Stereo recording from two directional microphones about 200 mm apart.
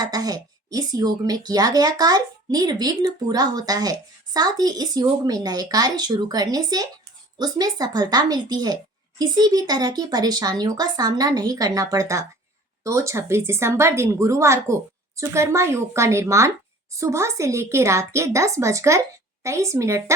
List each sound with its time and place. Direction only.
0.0 s a woman's voice: 20° right (ahead or behind)